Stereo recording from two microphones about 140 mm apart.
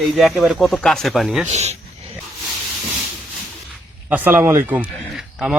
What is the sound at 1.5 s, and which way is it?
Speech, 50° right (ahead or behind).